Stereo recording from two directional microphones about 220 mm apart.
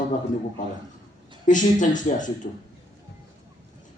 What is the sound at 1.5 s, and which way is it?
A man's voice, 35° left (ahead or behind).